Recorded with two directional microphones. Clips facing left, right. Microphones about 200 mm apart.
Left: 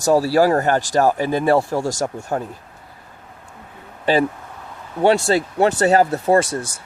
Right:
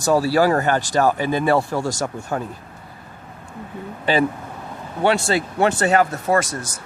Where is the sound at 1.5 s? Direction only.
10° left (ahead or behind).